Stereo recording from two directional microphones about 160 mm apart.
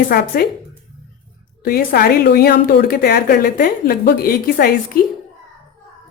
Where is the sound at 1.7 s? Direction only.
75° left (ahead or behind).